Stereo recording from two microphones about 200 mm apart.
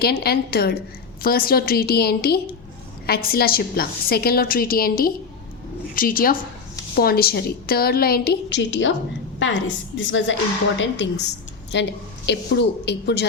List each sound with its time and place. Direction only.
0.0 s a woman's voice: 50° left (ahead or behind)